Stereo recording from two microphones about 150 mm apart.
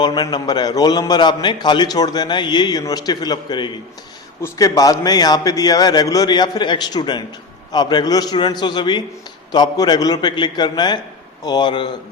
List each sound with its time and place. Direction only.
0.0 s a man's voice: 25° left (ahead or behind)